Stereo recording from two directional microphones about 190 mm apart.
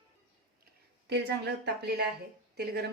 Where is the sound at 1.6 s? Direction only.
60° right (ahead or behind).